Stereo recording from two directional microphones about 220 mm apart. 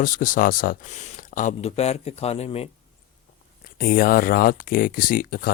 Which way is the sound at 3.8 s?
40° left (ahead or behind).